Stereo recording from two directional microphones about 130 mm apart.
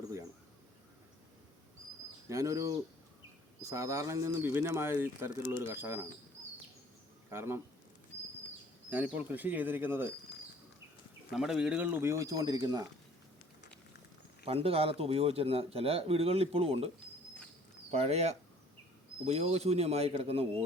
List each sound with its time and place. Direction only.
2.3 s speech: 25° right (ahead or behind)
7.3 s a man's voice: 20° right (ahead or behind)
8.9 s speech: 10° right (ahead or behind)
11.3 s speech: 5° right (ahead or behind); by 12.8 s 30° right (ahead or behind)
14.4 s a man's voice: 50° right (ahead or behind)
17.9 s a man's voice: 55° right (ahead or behind)